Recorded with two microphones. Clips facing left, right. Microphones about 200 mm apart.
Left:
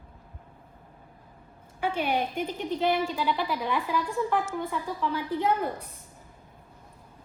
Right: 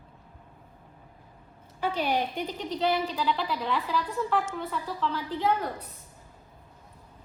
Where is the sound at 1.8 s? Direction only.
10° left (ahead or behind).